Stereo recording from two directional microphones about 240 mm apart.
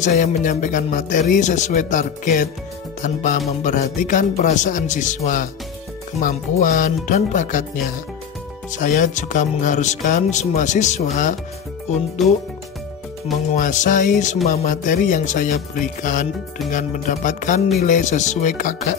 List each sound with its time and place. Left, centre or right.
0.0 s speech: left
12.2 s speech: centre
13.5 s speech: left